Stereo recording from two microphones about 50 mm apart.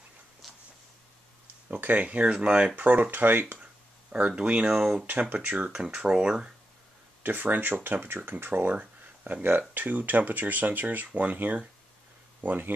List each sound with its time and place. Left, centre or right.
1.7 s speech: right
4.3 s speech: centre
4.7 s speech: centre
5.2 s speech: right
5.7 s speech: right
7.2 s speech: right
8.7 s speech: right